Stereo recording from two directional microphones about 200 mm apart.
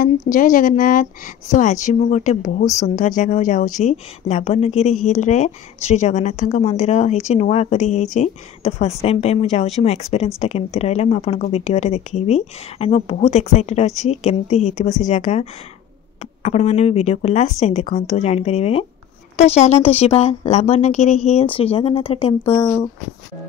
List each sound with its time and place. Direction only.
0.0 s a woman's voice: 40° left (ahead or behind)
16.4 s a woman's voice: 30° left (ahead or behind)